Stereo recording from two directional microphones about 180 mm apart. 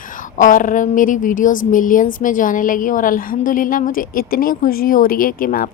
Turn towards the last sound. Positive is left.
turn(degrees=50)  # may be behind; listen again after turning